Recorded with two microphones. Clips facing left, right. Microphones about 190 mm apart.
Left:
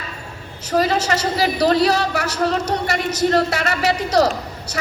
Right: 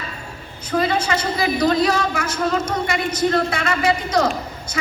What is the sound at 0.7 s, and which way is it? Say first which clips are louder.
A woman's voice: left 2 dB; 40° left (ahead or behind).